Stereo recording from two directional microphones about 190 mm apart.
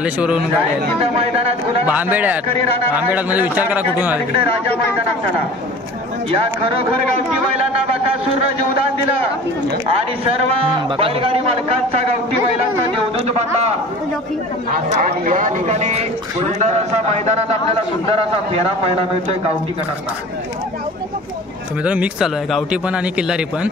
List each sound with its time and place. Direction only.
0.0 s a man's voice: 5° right (ahead or behind)
1.1 s a man's voice: 30° right (ahead or behind)
1.9 s a man's voice: 10° right (ahead or behind)
11.0 s speech: 30° right (ahead or behind)
13.1 s a man's voice: 35° right (ahead or behind)
14.9 s a man's voice: 40° right (ahead or behind)
21.8 s a man's voice: 5° right (ahead or behind)